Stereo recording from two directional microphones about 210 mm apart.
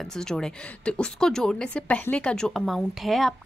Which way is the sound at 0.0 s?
5° left (ahead or behind).